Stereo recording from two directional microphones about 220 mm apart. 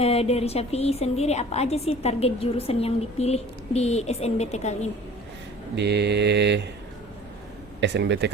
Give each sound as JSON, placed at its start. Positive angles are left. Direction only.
{"t": 0.0, "sound": "a woman's voice", "side_deg": 30}
{"t": 5.7, "sound": "mantra", "side_deg": -50}
{"t": 7.8, "sound": "mantra", "side_deg": -50}